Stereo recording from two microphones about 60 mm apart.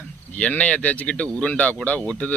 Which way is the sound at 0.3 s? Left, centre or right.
Left.